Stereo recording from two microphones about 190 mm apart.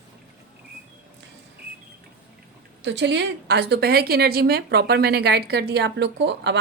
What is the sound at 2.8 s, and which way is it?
A woman's voice, 70° right (ahead or behind).